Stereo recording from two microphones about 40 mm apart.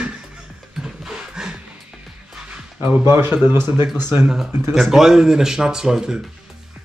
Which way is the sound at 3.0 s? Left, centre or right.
Right.